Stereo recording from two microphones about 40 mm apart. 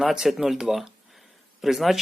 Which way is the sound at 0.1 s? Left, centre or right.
Centre.